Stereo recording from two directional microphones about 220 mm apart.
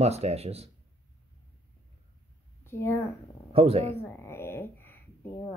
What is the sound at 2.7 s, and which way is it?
Speech, 10° left (ahead or behind).